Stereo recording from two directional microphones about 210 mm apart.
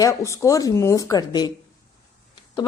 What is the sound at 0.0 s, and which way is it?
A woman's voice, 15° left (ahead or behind).